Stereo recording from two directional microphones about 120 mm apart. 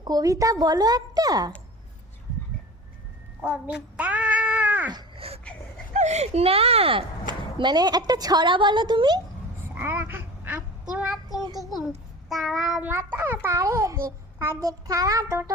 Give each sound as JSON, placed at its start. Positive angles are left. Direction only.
{"t": 0.0, "sound": "speech", "side_deg": -35}
{"t": 3.4, "sound": "cat", "side_deg": -10}
{"t": 4.9, "sound": "a sound", "side_deg": -35}
{"t": 5.9, "sound": "speech", "side_deg": -75}
{"t": 9.7, "sound": "a sound", "side_deg": -15}
{"t": 10.9, "sound": "child singing", "side_deg": -10}
{"t": 12.3, "sound": "child singing", "side_deg": 0}
{"t": 12.8, "sound": "a child's voice", "side_deg": -15}
{"t": 13.6, "sound": "a child's voice", "side_deg": -25}
{"t": 14.6, "sound": "child singing", "side_deg": -30}